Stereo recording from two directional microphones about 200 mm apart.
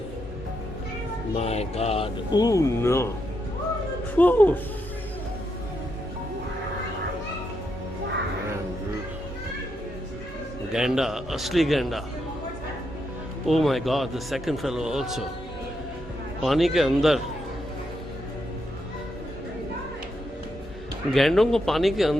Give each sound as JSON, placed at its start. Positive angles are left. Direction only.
{"t": 1.4, "sound": "mantra", "side_deg": 30}
{"t": 2.3, "sound": "speech", "side_deg": 15}
{"t": 4.1, "sound": "speech", "side_deg": 10}
{"t": 10.7, "sound": "speech", "side_deg": -5}
{"t": 13.5, "sound": "speech", "side_deg": 0}
{"t": 16.4, "sound": "speech", "side_deg": 0}
{"t": 21.1, "sound": "speech", "side_deg": 0}